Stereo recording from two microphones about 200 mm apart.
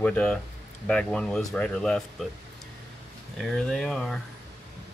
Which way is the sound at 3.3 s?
Centre (ahead or behind).